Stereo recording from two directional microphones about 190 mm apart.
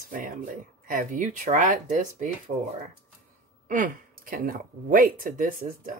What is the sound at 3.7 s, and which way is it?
Speech, 45° right (ahead or behind).